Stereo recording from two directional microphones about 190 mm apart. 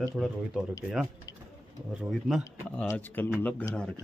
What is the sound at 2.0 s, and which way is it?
Speech, centre (ahead or behind).